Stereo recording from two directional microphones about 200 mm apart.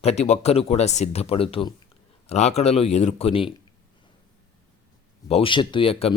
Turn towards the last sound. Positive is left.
turn(degrees=30)  # may be behind; listen again after turning